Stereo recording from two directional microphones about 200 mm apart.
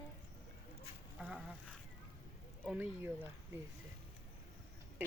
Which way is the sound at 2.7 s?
10° right (ahead or behind).